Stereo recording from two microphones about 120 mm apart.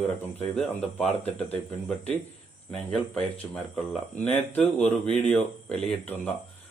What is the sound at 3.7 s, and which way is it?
A man's voice, 15° left (ahead or behind).